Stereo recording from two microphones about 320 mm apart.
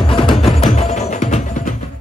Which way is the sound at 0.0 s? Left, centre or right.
Centre.